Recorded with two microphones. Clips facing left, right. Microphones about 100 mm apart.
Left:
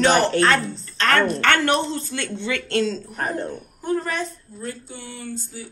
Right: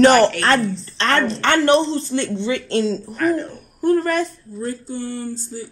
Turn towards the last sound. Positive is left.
turn(degrees=-45)  # may be behind; listen again after turning